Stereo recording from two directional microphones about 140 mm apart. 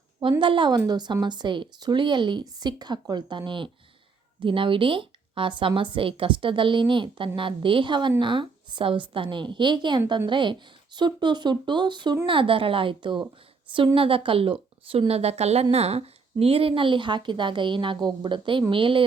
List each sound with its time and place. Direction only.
0.2 s a woman's voice: 35° right (ahead or behind)